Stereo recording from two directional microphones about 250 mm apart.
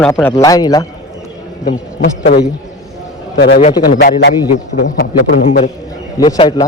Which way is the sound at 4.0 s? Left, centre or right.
Left.